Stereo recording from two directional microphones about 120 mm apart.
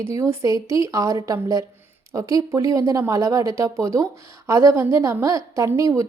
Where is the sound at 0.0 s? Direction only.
25° right (ahead or behind).